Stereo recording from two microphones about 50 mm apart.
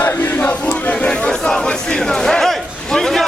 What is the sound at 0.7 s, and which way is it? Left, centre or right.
Chatter, left.